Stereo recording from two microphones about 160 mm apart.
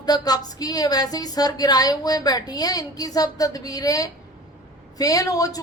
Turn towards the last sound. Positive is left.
turn(degrees=20)  # may be behind; listen again after turning